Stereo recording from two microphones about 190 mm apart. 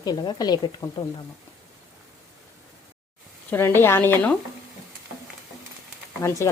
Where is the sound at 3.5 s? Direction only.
10° left (ahead or behind).